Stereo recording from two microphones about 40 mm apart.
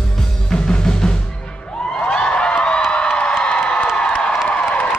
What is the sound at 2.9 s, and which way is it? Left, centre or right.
Cheering, left.